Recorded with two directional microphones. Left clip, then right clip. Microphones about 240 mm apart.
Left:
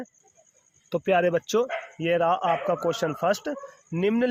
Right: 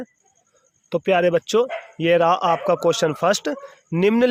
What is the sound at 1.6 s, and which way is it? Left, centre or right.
Speech, right.